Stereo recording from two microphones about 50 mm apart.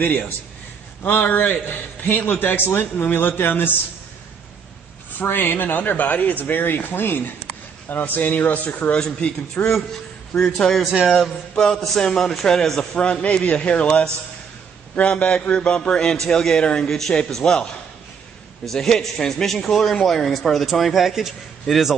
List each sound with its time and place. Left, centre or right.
1.0 s speech: left
5.2 s speech: left
8.9 s a man's voice: centre
10.9 s speech: centre
11.7 s a man's voice: centre
18.7 s a man's voice: centre